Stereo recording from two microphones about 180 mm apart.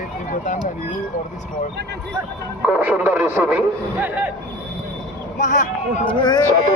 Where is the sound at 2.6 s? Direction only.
10° right (ahead or behind).